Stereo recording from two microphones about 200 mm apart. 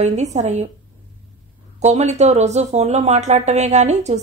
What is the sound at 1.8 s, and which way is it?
Speech, 35° right (ahead or behind).